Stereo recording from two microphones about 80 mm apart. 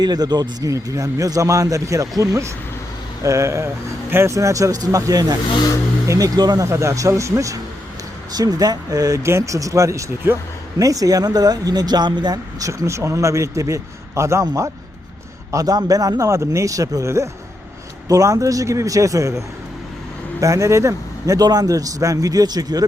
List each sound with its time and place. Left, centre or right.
0.0 s speech: right
0.7 s speech: right
6.7 s speech: right
8.3 s speech: right
9.2 s speech: right
15.5 s speech: right